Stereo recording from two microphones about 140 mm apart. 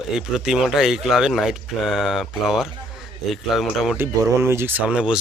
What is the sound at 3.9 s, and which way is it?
Speech, 20° right (ahead or behind).